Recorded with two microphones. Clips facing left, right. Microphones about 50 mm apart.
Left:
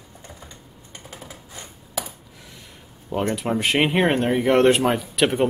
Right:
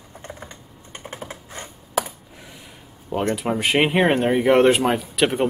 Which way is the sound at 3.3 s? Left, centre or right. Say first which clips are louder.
Right 2 dB; centre.